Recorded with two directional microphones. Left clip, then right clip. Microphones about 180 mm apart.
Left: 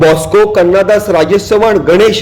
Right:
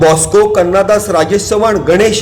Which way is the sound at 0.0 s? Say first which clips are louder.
Left 1 dB; 15° left (ahead or behind).